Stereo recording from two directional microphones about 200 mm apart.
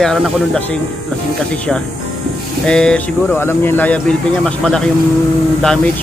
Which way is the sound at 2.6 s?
5° left (ahead or behind).